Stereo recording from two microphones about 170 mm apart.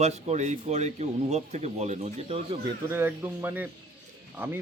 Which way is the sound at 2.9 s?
15° right (ahead or behind).